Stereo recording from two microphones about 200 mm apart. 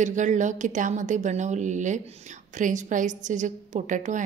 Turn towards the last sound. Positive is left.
turn(degrees=-40)  # may be behind; listen again after turning